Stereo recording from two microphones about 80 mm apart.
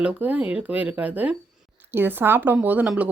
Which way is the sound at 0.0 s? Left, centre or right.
Centre.